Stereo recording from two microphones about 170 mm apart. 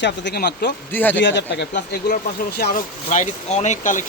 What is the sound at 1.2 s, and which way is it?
Speech, 90° left.